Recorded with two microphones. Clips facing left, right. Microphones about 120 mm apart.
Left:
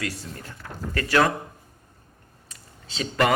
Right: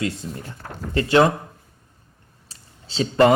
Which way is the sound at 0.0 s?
20° right (ahead or behind).